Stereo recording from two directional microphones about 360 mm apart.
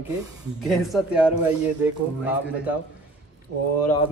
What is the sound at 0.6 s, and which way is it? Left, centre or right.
A man's voice, centre.